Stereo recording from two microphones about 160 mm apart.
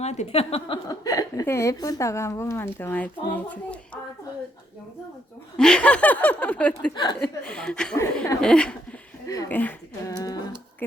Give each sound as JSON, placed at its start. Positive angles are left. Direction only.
{"t": 0.0, "sound": "speech", "side_deg": 45}
{"t": 0.9, "sound": "speech", "side_deg": 20}
{"t": 5.5, "sound": "speech", "side_deg": 5}
{"t": 6.9, "sound": "a woman's voice", "side_deg": 25}
{"t": 7.2, "sound": "a woman's voice", "side_deg": 5}
{"t": 9.2, "sound": "speech", "side_deg": 20}
{"t": 9.5, "sound": "speech", "side_deg": 10}
{"t": 10.2, "sound": "a sound", "side_deg": 25}